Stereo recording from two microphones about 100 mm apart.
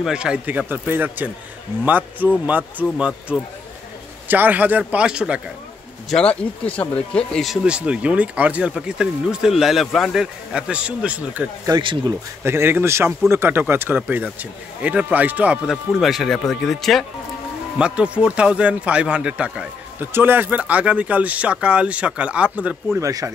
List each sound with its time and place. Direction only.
0.0 s speech: 10° right (ahead or behind)
6.0 s speech: 5° left (ahead or behind)
7.6 s speech: 10° right (ahead or behind)
11.7 s speech: 50° right (ahead or behind)
12.1 s speech: 25° right (ahead or behind)
15.7 s speech: centre (ahead or behind)
17.7 s speech: 10° right (ahead or behind)
20.1 s speech: 20° right (ahead or behind)
22.9 s speech: 30° right (ahead or behind)